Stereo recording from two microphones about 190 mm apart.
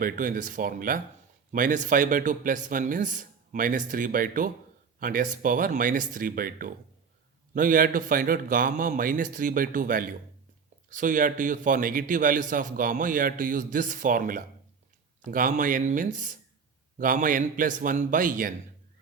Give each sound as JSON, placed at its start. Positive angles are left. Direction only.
{"t": 0.0, "sound": "a man's voice", "side_deg": -45}